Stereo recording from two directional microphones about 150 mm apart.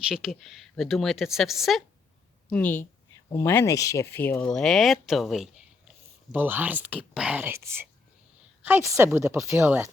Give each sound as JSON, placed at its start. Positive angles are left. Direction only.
{"t": 0.1, "sound": "a woman's voice", "side_deg": 0}
{"t": 2.5, "sound": "speech", "side_deg": 10}
{"t": 6.3, "sound": "speech", "side_deg": -10}